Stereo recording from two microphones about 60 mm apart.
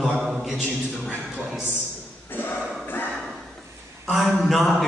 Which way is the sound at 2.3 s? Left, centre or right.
Left.